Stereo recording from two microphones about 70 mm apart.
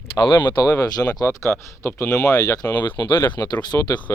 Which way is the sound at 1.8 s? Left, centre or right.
Left.